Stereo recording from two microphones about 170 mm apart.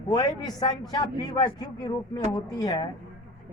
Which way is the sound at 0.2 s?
20° left (ahead or behind).